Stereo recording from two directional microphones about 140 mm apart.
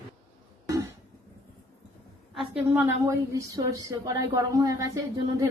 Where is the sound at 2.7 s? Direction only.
20° right (ahead or behind).